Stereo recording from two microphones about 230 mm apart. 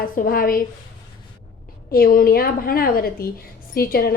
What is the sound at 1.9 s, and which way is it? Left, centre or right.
A woman's voice, left.